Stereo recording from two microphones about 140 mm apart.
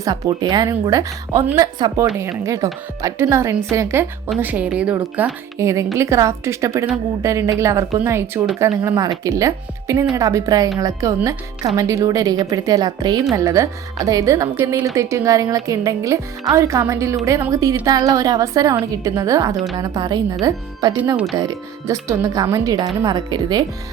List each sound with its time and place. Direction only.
0.0 s speech: 30° right (ahead or behind); by 5.3 s 10° right (ahead or behind)
5.5 s speech: 20° right (ahead or behind)